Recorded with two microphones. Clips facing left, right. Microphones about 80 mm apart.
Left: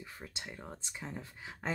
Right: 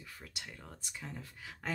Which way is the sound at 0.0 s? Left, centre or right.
Left.